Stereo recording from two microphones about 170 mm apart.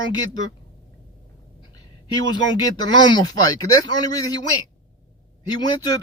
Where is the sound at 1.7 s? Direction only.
25° left (ahead or behind).